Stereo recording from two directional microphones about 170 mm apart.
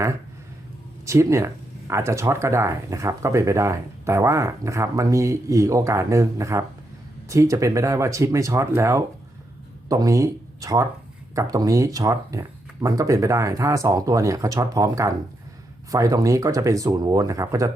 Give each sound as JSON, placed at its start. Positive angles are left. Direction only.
{"t": 1.0, "sound": "speech", "side_deg": -15}